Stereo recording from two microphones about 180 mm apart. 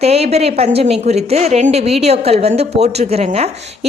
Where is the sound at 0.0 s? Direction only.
35° right (ahead or behind).